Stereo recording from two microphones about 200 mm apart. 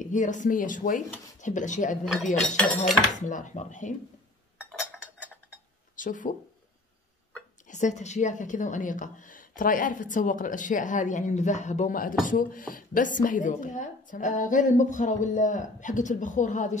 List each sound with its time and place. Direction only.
0.0 s a woman's voice: 40° left (ahead or behind)
2.4 s speech: 5° left (ahead or behind)
3.2 s a woman's voice: 40° left (ahead or behind)
4.6 s cutlery: 5° right (ahead or behind)
5.9 s speech: 40° left (ahead or behind)
7.6 s a woman's voice: 35° left (ahead or behind)